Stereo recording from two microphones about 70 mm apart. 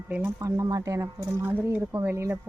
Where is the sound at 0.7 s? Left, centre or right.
Right.